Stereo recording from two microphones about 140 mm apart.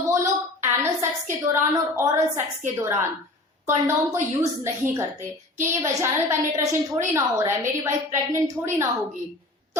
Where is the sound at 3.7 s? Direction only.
20° right (ahead or behind).